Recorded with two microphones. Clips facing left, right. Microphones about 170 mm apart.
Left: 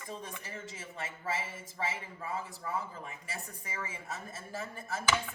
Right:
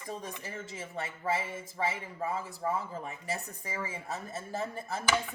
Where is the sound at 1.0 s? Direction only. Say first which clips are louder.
Right 5 dB; 35° right (ahead or behind).